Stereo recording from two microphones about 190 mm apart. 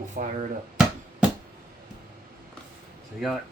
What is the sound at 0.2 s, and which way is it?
Speech, 40° right (ahead or behind).